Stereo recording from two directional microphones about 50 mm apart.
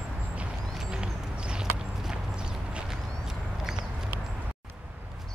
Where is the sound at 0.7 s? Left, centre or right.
Centre.